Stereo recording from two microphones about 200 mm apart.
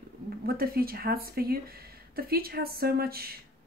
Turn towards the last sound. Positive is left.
turn(degrees=-50)  # may be behind; listen again after turning